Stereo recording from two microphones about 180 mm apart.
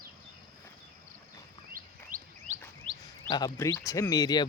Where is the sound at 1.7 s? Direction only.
50° right (ahead or behind).